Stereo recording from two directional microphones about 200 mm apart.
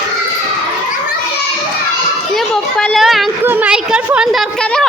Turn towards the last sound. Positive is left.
turn(degrees=5)  # may be behind; listen again after turning